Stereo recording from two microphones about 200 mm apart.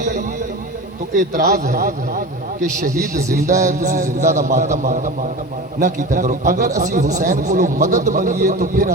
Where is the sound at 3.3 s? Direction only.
40° right (ahead or behind).